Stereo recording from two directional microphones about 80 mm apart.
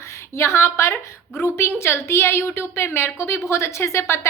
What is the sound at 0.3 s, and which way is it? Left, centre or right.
A woman's voice, left.